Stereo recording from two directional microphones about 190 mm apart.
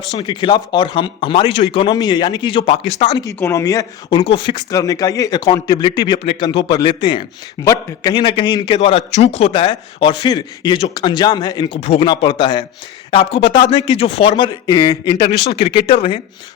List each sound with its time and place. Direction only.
0.2 s a man's voice: 25° left (ahead or behind)
3.3 s a man's voice: 15° left (ahead or behind)
11.8 s a man's voice: 35° left (ahead or behind)